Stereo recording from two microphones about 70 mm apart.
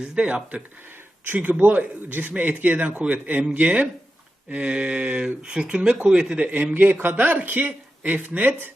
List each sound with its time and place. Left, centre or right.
0.0 s speech: centre